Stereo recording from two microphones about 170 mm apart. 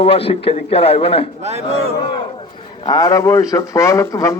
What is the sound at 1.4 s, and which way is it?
Speech, 40° right (ahead or behind).